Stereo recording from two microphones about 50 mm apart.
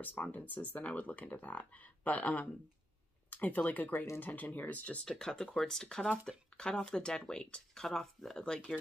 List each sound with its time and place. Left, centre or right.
0.0 s speech: left
5.2 s speech: centre